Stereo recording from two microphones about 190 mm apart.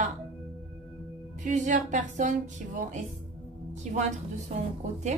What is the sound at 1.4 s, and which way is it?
Speech, 40° right (ahead or behind).